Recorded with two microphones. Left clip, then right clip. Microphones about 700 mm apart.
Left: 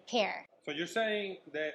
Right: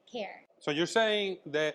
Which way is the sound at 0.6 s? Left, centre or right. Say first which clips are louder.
Right 7 dB; right.